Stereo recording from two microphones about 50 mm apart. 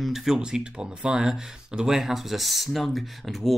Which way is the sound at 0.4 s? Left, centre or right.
Centre.